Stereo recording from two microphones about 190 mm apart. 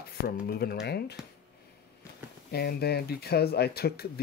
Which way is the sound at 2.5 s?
55° left (ahead or behind).